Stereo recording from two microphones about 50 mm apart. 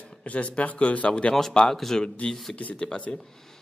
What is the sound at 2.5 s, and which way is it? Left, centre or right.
Speech, left.